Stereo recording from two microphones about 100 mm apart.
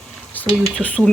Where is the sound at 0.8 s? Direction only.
10° left (ahead or behind).